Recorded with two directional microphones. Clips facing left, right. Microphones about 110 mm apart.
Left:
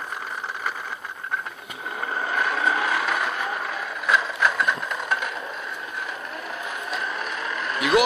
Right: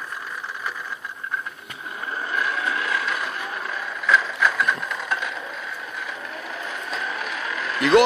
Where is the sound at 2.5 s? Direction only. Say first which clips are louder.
Left 3 dB; 90° left.